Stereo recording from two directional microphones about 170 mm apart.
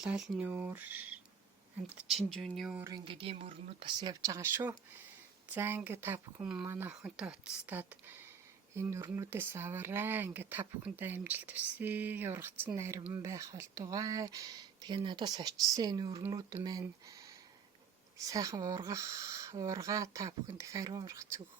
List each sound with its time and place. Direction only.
0.0 s speech: 5° right (ahead or behind)
2.0 s speech: centre (ahead or behind)
2.7 s speech: 15° right (ahead or behind)
3.0 s speech: 30° right (ahead or behind)